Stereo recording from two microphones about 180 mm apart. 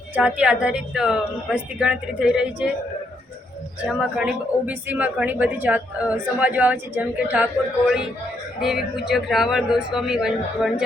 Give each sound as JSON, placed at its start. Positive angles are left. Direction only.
{"t": 0.1, "sound": "a woman's voice", "side_deg": -10}
{"t": 3.8, "sound": "a woman's voice", "side_deg": -5}